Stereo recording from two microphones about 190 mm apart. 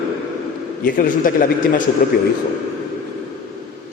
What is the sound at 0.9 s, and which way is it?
A man's voice, 45° left (ahead or behind).